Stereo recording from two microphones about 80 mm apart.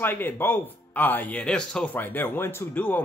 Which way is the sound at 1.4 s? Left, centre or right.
Centre.